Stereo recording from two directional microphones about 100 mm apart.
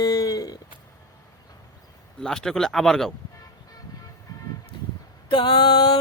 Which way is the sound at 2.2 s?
5° left (ahead or behind).